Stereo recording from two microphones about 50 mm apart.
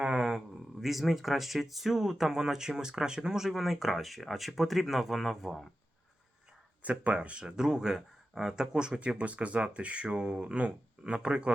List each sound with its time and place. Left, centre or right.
0.0 s a sound: centre
0.3 s speech: centre
6.8 s speech: right